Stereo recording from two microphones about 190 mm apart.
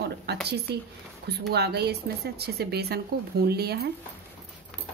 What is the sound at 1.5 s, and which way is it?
Speech, 60° right (ahead or behind).